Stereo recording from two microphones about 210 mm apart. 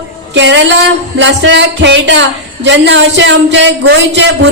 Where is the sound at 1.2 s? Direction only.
60° right (ahead or behind).